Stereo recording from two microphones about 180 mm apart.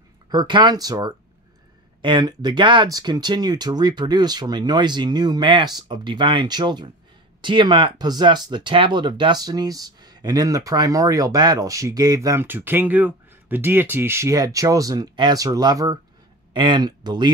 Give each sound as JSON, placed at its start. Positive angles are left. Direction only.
{"t": 0.3, "sound": "speech", "side_deg": -25}